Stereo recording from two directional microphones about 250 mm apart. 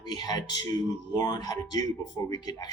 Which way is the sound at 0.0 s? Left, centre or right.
Centre.